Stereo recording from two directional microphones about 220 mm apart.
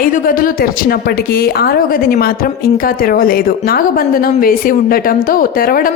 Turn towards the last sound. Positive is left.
turn(degrees=40)  # may be behind; listen again after turning